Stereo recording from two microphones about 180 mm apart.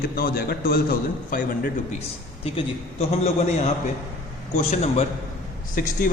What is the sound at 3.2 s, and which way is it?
A man's voice, 40° left (ahead or behind).